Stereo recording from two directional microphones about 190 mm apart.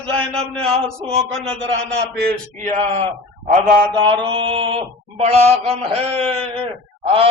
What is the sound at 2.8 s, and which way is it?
Mantra, 30° right (ahead or behind).